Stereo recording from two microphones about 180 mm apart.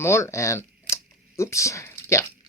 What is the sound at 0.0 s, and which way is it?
Speech, 15° left (ahead or behind).